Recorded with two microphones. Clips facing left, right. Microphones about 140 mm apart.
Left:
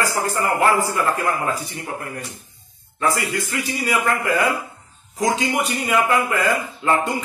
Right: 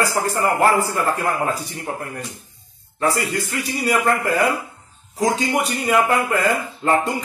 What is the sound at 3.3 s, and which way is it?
A man's voice, 40° right (ahead or behind).